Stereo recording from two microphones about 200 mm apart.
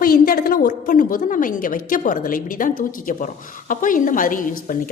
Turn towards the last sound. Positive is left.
turn(degrees=40)  # may be behind; listen again after turning